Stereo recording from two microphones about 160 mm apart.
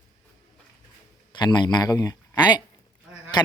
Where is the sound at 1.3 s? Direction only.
30° left (ahead or behind).